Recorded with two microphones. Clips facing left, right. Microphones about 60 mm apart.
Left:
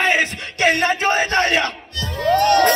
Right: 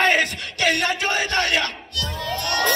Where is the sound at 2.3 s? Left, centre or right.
Left.